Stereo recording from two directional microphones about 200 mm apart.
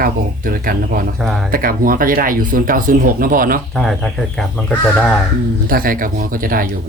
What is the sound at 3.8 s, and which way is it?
Speech, centre (ahead or behind).